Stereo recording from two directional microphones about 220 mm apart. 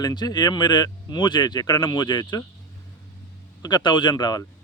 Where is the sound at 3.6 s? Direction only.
20° left (ahead or behind).